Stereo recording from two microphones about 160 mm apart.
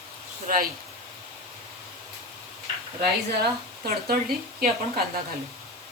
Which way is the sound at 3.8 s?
70° right (ahead or behind).